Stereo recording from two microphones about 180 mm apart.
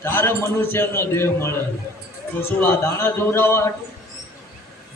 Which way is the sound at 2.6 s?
10° left (ahead or behind).